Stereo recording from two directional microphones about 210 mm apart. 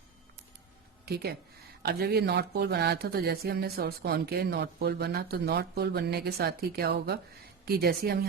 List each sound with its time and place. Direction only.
1.0 s speech: 50° right (ahead or behind)